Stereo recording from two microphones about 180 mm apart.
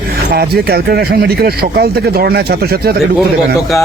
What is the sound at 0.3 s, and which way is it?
Speech, 60° right (ahead or behind).